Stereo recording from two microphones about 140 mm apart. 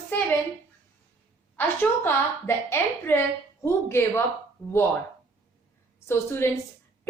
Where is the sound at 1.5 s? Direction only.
15° left (ahead or behind).